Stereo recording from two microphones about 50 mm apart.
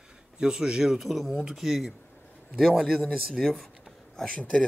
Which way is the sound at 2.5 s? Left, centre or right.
Centre.